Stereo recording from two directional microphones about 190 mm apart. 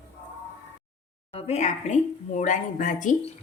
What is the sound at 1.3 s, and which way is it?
A woman's voice, 30° left (ahead or behind).